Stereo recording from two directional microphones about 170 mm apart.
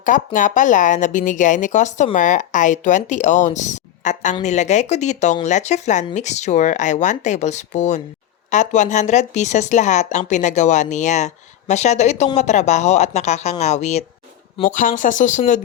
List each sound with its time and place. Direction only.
0.3 s speech: 50° left (ahead or behind)